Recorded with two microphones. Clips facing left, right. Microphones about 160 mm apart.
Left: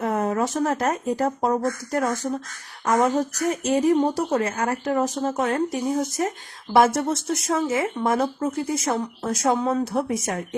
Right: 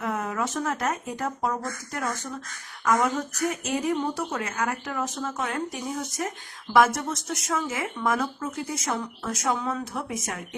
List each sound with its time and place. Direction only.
0.0 s speech: 35° left (ahead or behind)